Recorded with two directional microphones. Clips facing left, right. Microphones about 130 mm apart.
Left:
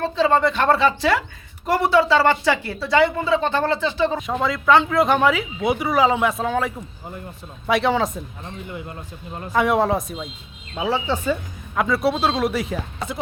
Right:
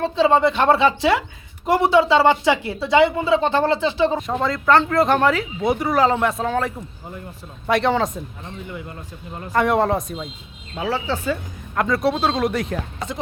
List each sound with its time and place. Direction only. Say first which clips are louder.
0.0 s speech: right 2 dB; 25° right (ahead or behind)
4.2 s speech: right 1 dB; centre (ahead or behind)
9.3 s speech: even; centre (ahead or behind)
10.8 s speech: left 1 dB; 15° left (ahead or behind)
11.7 s speech: even; 5° left (ahead or behind)